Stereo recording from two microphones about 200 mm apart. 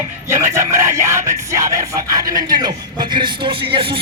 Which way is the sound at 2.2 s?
20° right (ahead or behind).